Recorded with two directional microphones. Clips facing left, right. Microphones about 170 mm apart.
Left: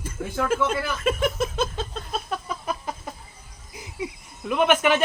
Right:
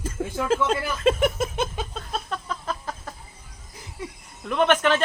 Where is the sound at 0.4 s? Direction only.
30° right (ahead or behind).